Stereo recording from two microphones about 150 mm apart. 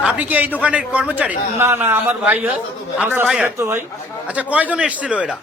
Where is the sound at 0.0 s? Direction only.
10° right (ahead or behind).